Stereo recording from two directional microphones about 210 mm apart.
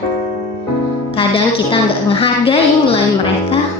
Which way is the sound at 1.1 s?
25° left (ahead or behind).